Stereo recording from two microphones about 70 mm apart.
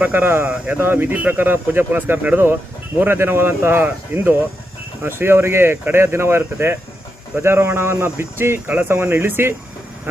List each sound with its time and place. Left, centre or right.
0.0 s speech: right